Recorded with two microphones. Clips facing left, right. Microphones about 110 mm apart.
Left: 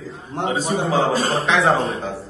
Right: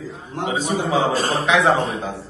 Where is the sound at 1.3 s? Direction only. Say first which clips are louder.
Even; centre (ahead or behind).